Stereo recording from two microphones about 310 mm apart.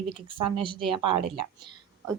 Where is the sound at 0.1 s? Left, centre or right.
Centre.